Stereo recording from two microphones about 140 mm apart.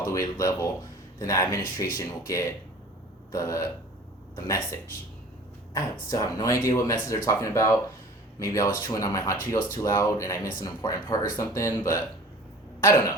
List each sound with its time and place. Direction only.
0.0 s speech: 25° left (ahead or behind)